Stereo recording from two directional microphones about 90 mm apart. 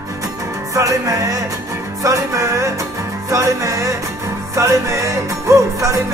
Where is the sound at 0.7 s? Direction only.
40° right (ahead or behind).